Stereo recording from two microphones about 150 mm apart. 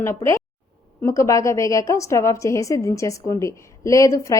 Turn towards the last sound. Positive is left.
turn(degrees=20)  # may be behind; listen again after turning